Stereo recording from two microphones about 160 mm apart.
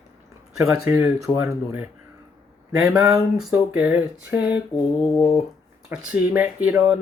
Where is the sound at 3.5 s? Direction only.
10° right (ahead or behind).